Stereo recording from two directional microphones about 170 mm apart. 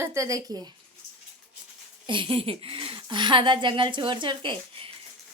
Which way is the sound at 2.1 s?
30° right (ahead or behind).